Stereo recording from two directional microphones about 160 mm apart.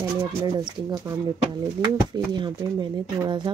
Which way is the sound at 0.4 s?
30° right (ahead or behind).